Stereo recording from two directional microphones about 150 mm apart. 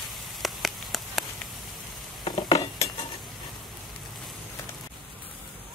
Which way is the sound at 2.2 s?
35° left (ahead or behind).